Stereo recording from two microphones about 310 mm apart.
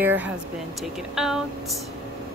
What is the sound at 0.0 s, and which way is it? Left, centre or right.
Speech, centre.